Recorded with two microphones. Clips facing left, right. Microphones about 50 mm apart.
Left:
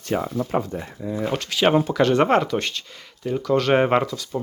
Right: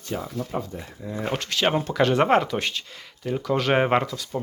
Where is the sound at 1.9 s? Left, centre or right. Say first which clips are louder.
Left 2 dB; centre.